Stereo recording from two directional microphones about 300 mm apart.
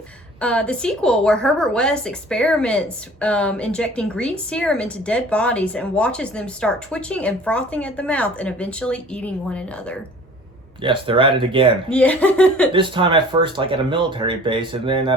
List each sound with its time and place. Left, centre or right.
0.3 s a woman's voice: centre
10.8 s speech: centre
11.9 s a woman's voice: centre
12.7 s speech: centre